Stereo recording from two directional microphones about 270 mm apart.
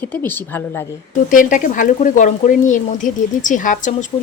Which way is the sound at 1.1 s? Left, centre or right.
Left.